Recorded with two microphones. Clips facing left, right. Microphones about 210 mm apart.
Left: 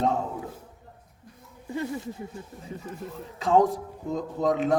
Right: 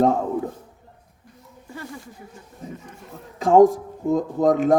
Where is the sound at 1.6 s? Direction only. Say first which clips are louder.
Left 6 dB; 20° left (ahead or behind).